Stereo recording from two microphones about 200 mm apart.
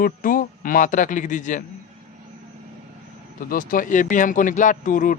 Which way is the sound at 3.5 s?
45° left (ahead or behind).